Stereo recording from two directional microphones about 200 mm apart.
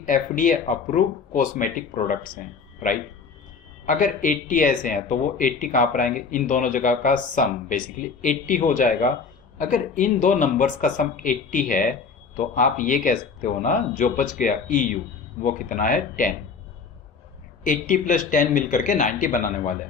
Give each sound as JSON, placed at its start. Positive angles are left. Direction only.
{"t": 0.0, "sound": "speech", "side_deg": 40}
{"t": 17.6, "sound": "speech", "side_deg": 40}